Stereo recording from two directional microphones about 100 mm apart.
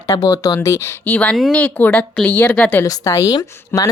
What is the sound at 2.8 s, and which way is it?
Speech, 35° left (ahead or behind).